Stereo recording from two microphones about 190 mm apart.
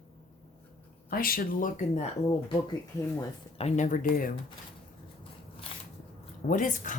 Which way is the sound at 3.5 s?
35° left (ahead or behind).